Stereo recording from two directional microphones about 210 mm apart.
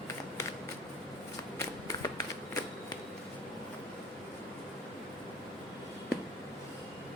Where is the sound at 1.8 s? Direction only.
15° left (ahead or behind).